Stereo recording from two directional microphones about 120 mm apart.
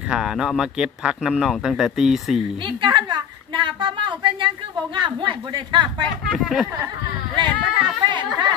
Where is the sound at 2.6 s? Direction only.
40° right (ahead or behind).